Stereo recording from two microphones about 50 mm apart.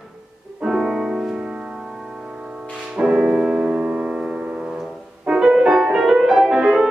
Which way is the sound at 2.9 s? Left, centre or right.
Centre.